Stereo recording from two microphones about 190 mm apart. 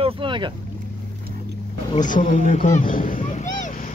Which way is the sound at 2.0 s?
45° left (ahead or behind).